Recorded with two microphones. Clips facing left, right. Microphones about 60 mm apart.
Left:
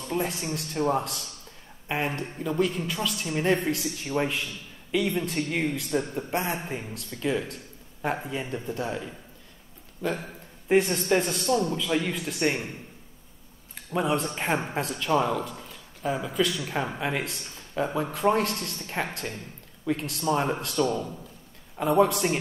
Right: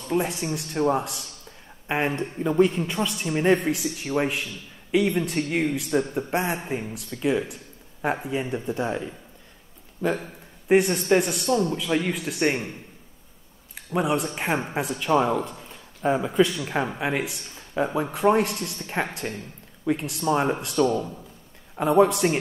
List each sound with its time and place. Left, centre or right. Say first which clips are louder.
0.1 s a man's voice: right 4 dB; centre
1.9 s a man's voice: right 4 dB; right
10.7 s a man's voice: right 3 dB; centre
11.7 s a man's voice: right 2 dB; centre
13.9 s a man's voice: right 2 dB; centre